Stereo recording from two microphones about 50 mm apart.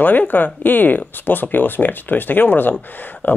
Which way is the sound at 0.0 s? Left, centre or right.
Left.